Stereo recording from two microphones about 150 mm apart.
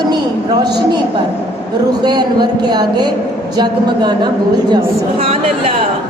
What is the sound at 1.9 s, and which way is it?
A woman's voice, 30° right (ahead or behind).